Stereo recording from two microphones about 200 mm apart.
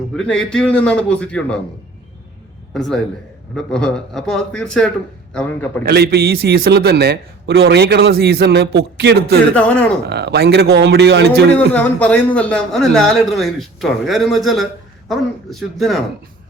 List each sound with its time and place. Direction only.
0.2 s a man's voice: 5° left (ahead or behind)
2.7 s a man's voice: centre (ahead or behind)
5.8 s a man's voice: 50° right (ahead or behind)
9.6 s speech: 5° left (ahead or behind)
10.1 s a man's voice: 55° right (ahead or behind)
11.7 s a man's voice: 5° left (ahead or behind)